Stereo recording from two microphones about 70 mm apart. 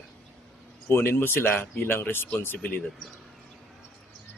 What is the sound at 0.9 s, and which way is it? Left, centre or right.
A man's voice, left.